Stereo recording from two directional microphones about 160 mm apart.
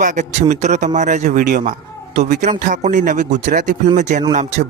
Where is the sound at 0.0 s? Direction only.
50° right (ahead or behind).